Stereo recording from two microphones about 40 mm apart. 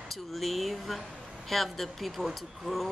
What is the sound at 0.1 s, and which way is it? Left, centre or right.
Speech, centre.